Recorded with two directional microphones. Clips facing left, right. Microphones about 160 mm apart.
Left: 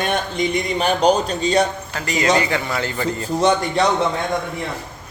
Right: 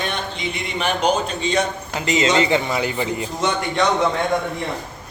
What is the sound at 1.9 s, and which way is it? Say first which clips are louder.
A man's voice: right 1 dB; 20° right (ahead or behind).